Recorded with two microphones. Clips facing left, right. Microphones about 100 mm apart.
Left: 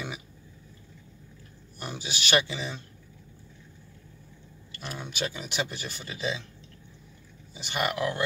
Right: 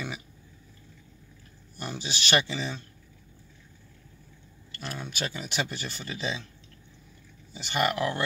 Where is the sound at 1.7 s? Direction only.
10° left (ahead or behind).